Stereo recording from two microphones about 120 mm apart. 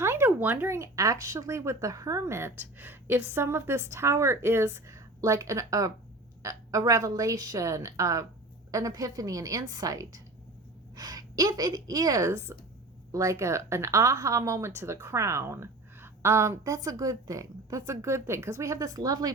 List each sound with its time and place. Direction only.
0.0 s a woman's voice: 20° right (ahead or behind)